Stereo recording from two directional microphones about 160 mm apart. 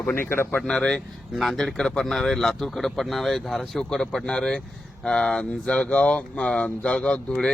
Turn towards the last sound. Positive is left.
turn(degrees=5)  # may be behind; listen again after turning